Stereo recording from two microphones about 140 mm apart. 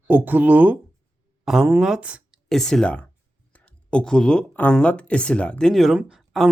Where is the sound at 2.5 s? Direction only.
5° left (ahead or behind).